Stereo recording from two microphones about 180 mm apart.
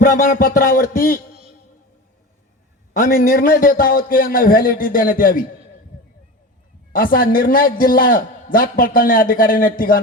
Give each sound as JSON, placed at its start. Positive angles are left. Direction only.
{"t": 0.0, "sound": "a man's voice", "side_deg": 50}
{"t": 2.9, "sound": "a man's voice", "side_deg": 50}
{"t": 6.9, "sound": "a man's voice", "side_deg": 50}